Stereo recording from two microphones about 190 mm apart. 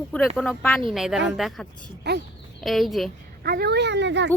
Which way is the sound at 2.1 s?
60° right (ahead or behind).